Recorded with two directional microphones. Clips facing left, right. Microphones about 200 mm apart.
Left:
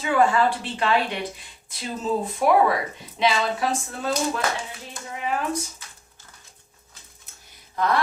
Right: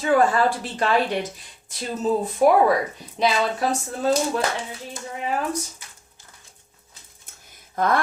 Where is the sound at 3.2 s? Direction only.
40° right (ahead or behind).